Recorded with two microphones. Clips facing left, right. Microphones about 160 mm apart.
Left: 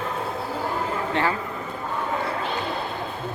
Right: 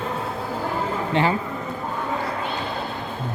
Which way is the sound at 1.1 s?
20° right (ahead or behind).